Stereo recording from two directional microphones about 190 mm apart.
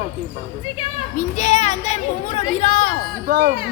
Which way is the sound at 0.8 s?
40° left (ahead or behind).